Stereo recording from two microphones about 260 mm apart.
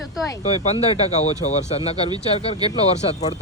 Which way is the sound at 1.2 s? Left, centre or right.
Left.